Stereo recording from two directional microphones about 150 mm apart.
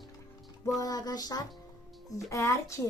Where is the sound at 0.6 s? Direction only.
25° left (ahead or behind).